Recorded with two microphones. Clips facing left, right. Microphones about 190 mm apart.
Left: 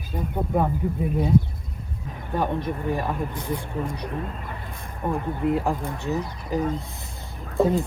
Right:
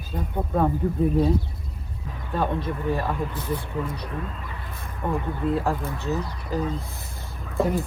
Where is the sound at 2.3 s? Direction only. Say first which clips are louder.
Even; 15° left (ahead or behind).